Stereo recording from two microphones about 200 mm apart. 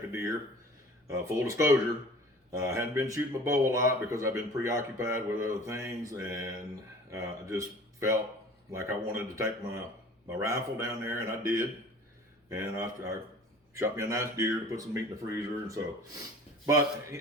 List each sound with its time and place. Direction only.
0.1 s speech: 15° right (ahead or behind)
7.1 s speech: 15° right (ahead or behind)